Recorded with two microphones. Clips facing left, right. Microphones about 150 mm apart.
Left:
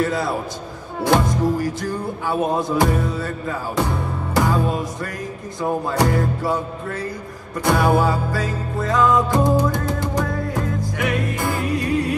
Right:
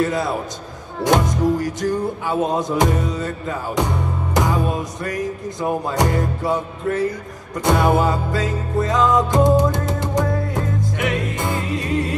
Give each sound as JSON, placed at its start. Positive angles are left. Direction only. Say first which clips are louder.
{"t": 0.0, "sound": "music", "louder": "right 1 dB", "side_deg": -20}